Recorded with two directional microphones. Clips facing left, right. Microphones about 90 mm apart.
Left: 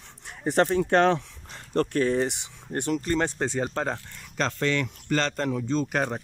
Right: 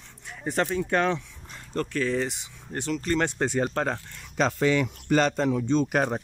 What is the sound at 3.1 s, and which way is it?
Speech, 30° left (ahead or behind).